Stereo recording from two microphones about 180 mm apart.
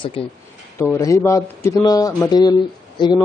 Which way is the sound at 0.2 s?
30° left (ahead or behind).